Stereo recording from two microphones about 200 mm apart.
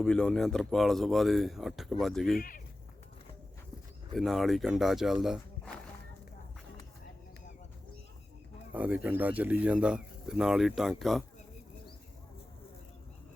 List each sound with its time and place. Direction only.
0.0 s speech: 5° left (ahead or behind)
4.1 s speech: centre (ahead or behind)
8.7 s speech: 5° right (ahead or behind)